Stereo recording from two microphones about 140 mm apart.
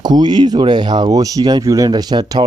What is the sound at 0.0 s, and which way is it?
Speech, 30° right (ahead or behind).